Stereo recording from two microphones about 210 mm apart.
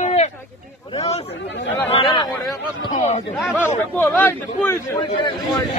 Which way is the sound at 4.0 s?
10° left (ahead or behind).